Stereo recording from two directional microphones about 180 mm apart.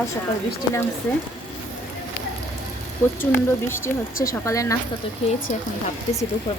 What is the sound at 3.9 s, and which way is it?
Speech, 5° left (ahead or behind).